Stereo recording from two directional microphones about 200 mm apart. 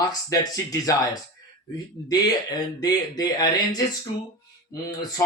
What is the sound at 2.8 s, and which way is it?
Speech, 20° left (ahead or behind).